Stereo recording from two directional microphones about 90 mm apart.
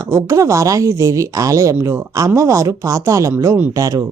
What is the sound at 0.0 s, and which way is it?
Speech, 35° right (ahead or behind).